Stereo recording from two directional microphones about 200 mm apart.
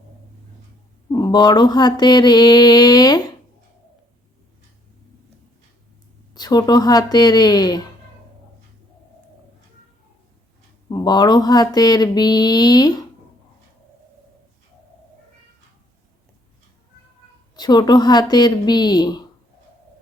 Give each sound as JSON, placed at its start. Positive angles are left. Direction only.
{"t": 1.1, "sound": "mantra", "side_deg": 20}
{"t": 6.3, "sound": "mantra", "side_deg": 20}
{"t": 10.8, "sound": "mantra", "side_deg": 20}
{"t": 17.5, "sound": "mantra", "side_deg": 20}